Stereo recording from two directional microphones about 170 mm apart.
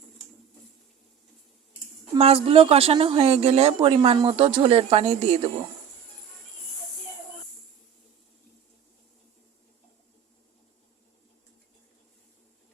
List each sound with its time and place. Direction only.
2.1 s speech: 35° right (ahead or behind)